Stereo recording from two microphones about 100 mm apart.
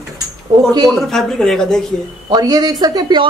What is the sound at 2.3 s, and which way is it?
Speech, 40° right (ahead or behind).